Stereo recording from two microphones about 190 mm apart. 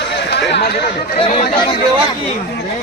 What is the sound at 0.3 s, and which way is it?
Chatter, 65° left (ahead or behind).